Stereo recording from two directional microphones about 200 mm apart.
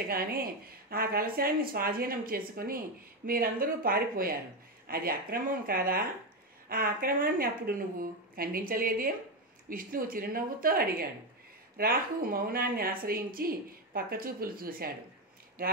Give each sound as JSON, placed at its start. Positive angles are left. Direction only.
{"t": 0.1, "sound": "a woman's voice", "side_deg": -45}